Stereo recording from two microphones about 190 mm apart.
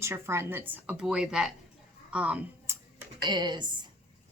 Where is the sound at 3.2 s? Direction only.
25° right (ahead or behind).